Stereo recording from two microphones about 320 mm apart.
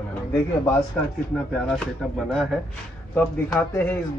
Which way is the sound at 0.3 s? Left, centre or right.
Centre.